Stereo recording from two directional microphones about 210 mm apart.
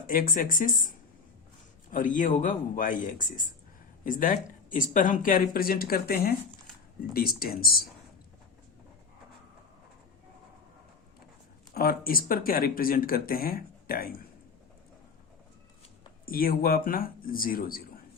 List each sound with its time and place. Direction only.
0.1 s speech: 40° left (ahead or behind)
11.7 s speech: 45° left (ahead or behind)
16.2 s speech: 45° left (ahead or behind)